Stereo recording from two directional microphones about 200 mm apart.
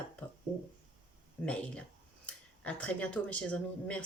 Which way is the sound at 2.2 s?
5° left (ahead or behind).